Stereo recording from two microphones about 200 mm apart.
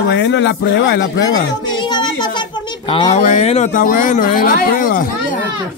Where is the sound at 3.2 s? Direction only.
35° left (ahead or behind).